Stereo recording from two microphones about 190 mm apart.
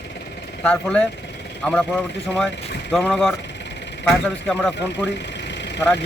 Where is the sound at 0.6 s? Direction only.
5° left (ahead or behind).